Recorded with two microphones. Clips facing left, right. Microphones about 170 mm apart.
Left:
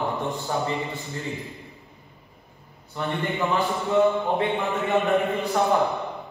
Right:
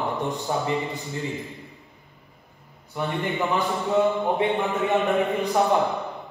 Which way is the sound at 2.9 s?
20° right (ahead or behind).